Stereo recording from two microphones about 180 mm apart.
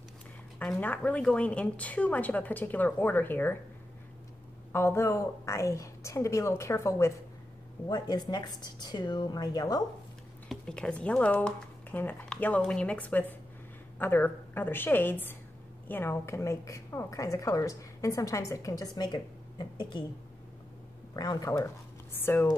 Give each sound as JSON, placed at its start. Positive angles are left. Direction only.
{"t": 0.6, "sound": "a woman's voice", "side_deg": 5}
{"t": 4.7, "sound": "a woman's voice", "side_deg": 15}
{"t": 10.5, "sound": "a woman's voice", "side_deg": 5}
{"t": 21.1, "sound": "a woman's voice", "side_deg": 20}